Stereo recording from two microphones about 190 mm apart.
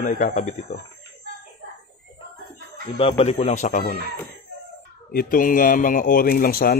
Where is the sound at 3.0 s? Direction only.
30° left (ahead or behind).